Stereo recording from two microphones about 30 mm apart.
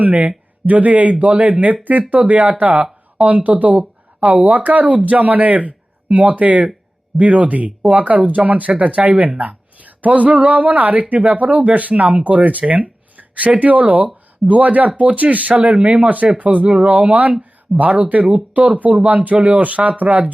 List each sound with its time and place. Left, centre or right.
0.0 s speech: right
15.7 s speech: right